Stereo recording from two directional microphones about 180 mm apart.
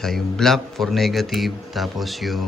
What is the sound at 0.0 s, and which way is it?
A man's voice, centre (ahead or behind).